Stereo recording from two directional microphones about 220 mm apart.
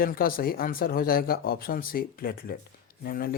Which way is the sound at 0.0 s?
40° left (ahead or behind).